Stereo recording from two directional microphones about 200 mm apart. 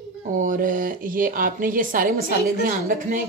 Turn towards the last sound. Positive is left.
turn(degrees=-45)  # may be behind; listen again after turning